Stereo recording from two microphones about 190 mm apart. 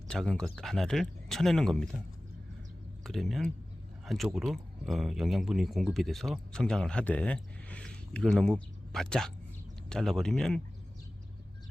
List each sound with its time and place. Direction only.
0.1 s speech: 5° left (ahead or behind)
3.0 s speech: centre (ahead or behind)